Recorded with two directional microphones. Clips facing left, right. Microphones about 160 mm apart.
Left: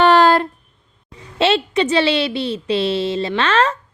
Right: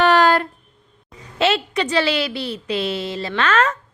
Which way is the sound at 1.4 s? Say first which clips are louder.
Left 3 dB; 25° left (ahead or behind).